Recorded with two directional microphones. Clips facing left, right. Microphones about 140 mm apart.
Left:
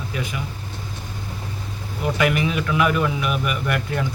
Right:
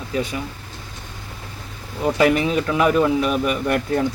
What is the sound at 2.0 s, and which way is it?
A man's voice, 30° right (ahead or behind).